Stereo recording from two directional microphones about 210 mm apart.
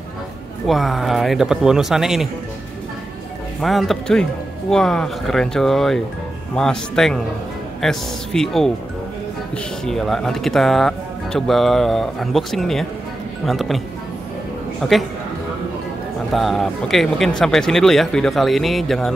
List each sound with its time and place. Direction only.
0.7 s speech: centre (ahead or behind)
3.6 s speech: centre (ahead or behind)
9.8 s speech: centre (ahead or behind)
14.8 s speech: centre (ahead or behind)
16.3 s speech: centre (ahead or behind)